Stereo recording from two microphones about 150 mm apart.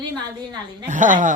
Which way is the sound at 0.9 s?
60° right (ahead or behind).